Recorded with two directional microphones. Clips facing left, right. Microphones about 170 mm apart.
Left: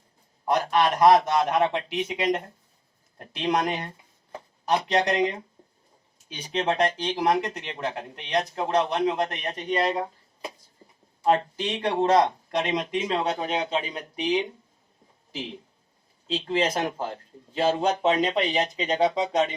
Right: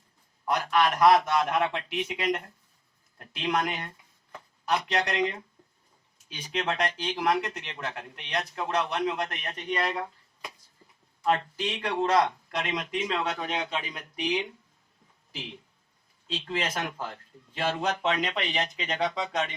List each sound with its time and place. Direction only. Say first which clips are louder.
0.4 s speech: left 3 dB; 35° left (ahead or behind)